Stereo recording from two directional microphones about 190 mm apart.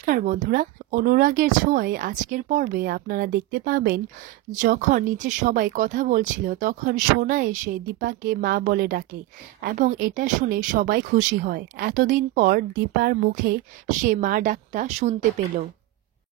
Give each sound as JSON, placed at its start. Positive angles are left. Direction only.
{"t": 0.0, "sound": "a woman's voice", "side_deg": -45}